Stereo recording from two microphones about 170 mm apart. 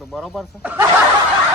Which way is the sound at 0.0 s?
Centre (ahead or behind).